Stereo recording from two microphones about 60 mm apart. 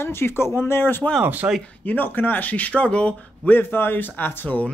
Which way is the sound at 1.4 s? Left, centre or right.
Right.